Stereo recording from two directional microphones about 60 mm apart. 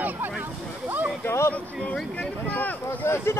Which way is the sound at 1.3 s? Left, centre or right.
Left.